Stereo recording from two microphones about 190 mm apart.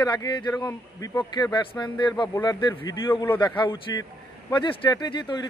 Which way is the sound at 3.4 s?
25° left (ahead or behind).